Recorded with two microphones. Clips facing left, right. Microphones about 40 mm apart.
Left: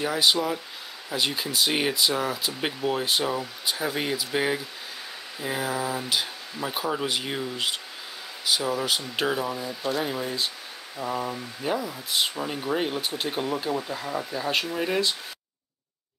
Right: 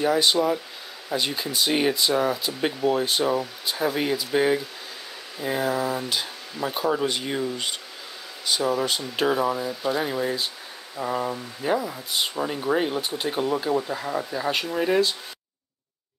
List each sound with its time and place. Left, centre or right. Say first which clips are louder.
0.0 s speech: right 3 dB; centre
13.7 s speech: right 4 dB; centre